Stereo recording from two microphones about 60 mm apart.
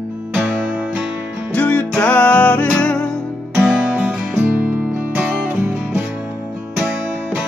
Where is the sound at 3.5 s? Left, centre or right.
Right.